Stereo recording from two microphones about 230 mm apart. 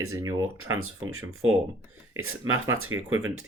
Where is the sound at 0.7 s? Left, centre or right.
Right.